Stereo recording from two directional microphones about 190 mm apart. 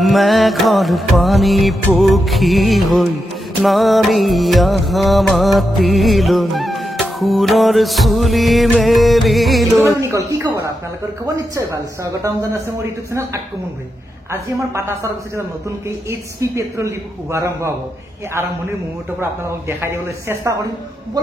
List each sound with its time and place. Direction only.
0.0 s music: centre (ahead or behind)
10.0 s a woman's voice: 15° right (ahead or behind)
19.7 s a woman's voice: 15° right (ahead or behind)